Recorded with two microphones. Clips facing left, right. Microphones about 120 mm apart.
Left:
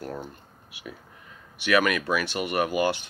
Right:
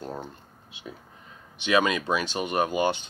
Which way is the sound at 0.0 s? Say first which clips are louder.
Left 1 dB; 20° right (ahead or behind).